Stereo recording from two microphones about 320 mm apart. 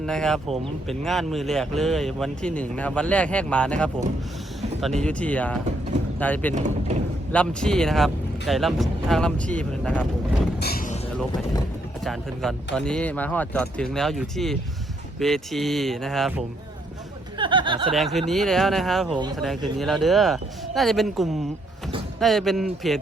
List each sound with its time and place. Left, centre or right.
0.0 s speech: centre
6.5 s speech: right
7.3 s speech: centre
10.6 s vehicle: left
12.0 s speech: centre
17.3 s speech: centre
17.9 s speech: centre